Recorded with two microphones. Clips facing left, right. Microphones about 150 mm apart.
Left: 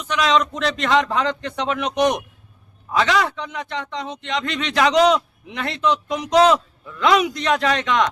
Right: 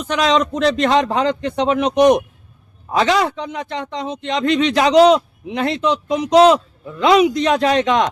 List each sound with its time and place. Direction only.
0.2 s a man's voice: 35° right (ahead or behind)